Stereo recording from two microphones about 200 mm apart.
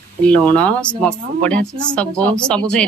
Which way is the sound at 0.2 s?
5° left (ahead or behind).